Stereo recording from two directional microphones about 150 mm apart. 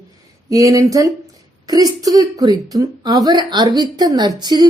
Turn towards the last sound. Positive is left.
turn(degrees=-30)  # may be behind; listen again after turning